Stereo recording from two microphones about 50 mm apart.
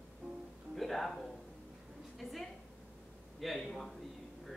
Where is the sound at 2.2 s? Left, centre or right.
Centre.